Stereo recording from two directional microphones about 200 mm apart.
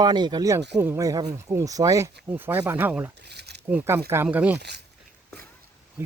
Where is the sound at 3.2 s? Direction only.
55° right (ahead or behind).